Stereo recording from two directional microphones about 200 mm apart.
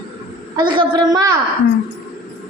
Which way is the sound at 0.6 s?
20° right (ahead or behind).